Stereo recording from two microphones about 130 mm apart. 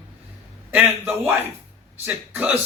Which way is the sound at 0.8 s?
15° right (ahead or behind).